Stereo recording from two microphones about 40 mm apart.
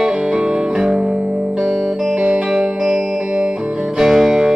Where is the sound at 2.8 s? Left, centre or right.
Centre.